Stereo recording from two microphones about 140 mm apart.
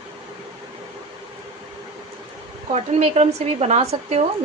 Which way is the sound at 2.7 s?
55° right (ahead or behind).